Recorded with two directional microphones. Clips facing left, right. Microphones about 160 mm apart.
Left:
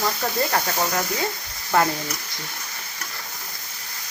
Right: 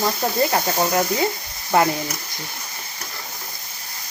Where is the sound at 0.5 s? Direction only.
20° right (ahead or behind).